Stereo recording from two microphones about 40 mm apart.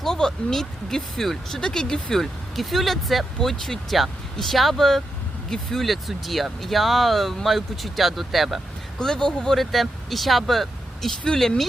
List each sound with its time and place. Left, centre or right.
0.0 s speech: centre
9.0 s speech: centre
9.6 s speech: centre